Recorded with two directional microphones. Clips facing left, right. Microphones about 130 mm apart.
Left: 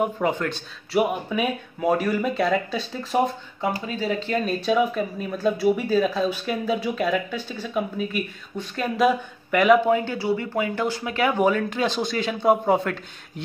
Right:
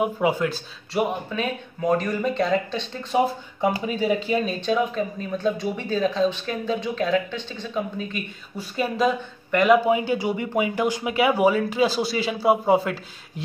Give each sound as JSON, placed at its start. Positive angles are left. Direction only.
{"t": 0.0, "sound": "speech", "side_deg": -5}
{"t": 1.3, "sound": "speech", "side_deg": 10}
{"t": 3.8, "sound": "speech", "side_deg": -15}
{"t": 4.5, "sound": "speech", "side_deg": 5}
{"t": 8.5, "sound": "speech", "side_deg": -5}
{"t": 9.8, "sound": "speech", "side_deg": -10}